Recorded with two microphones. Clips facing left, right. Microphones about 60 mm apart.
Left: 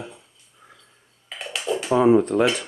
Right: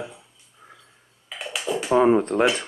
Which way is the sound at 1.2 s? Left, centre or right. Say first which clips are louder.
Left 1 dB; centre.